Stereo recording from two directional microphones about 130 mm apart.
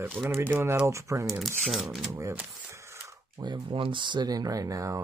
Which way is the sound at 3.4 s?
40° right (ahead or behind).